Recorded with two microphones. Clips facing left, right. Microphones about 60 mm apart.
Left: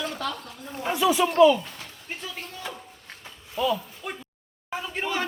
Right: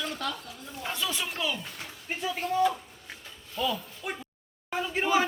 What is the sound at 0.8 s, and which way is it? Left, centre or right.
Speech, centre.